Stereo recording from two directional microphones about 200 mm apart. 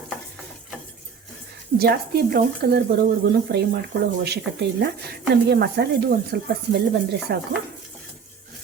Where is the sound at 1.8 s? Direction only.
50° right (ahead or behind).